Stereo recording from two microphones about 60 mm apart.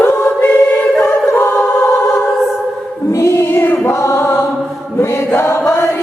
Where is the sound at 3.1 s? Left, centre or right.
Left.